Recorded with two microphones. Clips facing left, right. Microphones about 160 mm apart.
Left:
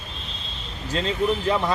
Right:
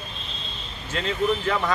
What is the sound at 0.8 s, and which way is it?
Speech, 30° left (ahead or behind).